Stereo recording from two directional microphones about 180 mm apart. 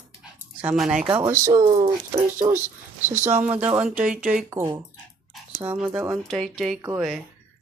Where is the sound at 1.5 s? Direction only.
30° right (ahead or behind).